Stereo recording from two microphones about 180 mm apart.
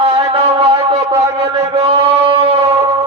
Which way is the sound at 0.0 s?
30° right (ahead or behind).